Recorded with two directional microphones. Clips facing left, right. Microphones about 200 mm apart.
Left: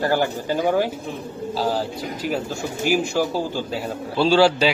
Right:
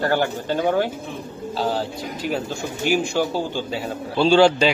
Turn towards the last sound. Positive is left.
turn(degrees=5)  # may be behind; listen again after turning